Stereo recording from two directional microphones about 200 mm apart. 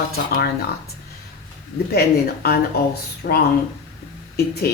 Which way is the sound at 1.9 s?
50° left (ahead or behind).